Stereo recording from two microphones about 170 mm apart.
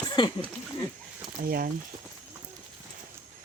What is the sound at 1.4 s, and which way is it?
Speech, 60° right (ahead or behind).